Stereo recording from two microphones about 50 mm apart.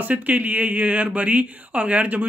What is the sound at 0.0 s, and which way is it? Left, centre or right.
Speech, right.